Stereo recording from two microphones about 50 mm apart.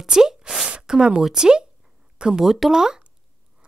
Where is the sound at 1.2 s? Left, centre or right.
Centre.